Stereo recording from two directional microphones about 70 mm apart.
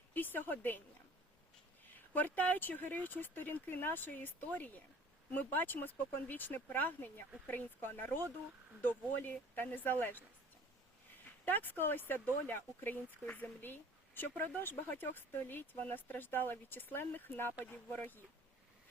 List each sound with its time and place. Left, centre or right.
0.1 s speech: left
1.9 s speech: left
11.4 s speech: left